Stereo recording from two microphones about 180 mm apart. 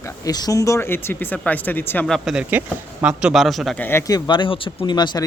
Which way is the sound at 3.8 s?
15° left (ahead or behind).